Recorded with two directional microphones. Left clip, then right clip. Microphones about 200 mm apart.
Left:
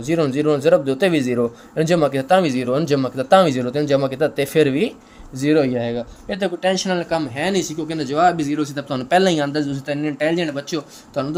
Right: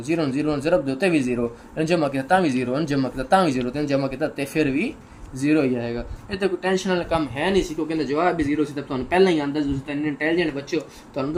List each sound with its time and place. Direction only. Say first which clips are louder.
0.1 s speech: left 5 dB; 40° left (ahead or behind)